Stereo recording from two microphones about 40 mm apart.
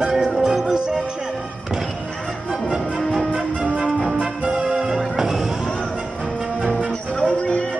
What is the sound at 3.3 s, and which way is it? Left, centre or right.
Music, right.